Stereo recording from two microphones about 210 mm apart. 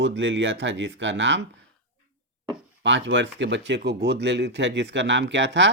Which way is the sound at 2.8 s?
60° right (ahead or behind).